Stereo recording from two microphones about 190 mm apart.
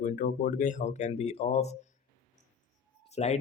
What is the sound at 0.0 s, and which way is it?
Speech, 45° left (ahead or behind).